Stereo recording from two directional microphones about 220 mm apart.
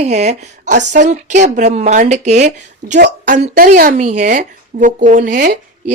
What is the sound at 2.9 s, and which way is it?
Speech, 50° right (ahead or behind).